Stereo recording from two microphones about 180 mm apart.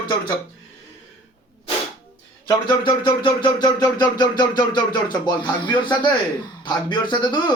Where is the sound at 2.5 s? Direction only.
25° left (ahead or behind).